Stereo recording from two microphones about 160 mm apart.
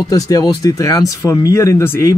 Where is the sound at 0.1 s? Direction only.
25° left (ahead or behind).